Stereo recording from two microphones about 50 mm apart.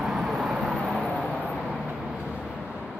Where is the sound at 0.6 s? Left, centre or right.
Centre.